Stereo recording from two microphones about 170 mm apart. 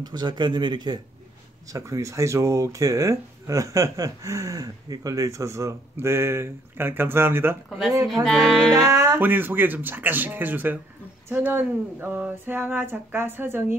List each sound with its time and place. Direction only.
0.0 s speech: 25° right (ahead or behind)
8.1 s music: centre (ahead or behind)
8.7 s speech: 20° right (ahead or behind)